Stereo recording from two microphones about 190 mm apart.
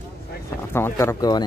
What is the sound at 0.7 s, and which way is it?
Speech, 15° left (ahead or behind).